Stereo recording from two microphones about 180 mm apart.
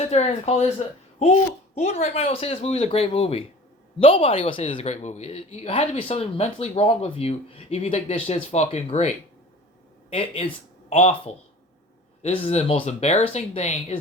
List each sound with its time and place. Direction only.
0.0 s a man's voice: 35° left (ahead or behind)